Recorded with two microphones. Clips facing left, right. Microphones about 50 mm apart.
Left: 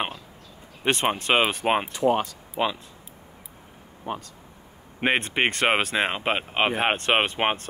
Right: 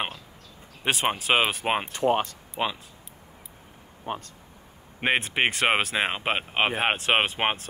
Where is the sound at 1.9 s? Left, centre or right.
Right.